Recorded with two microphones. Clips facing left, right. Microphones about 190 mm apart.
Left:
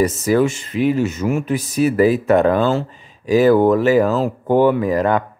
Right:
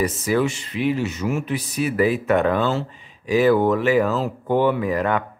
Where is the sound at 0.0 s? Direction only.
45° left (ahead or behind).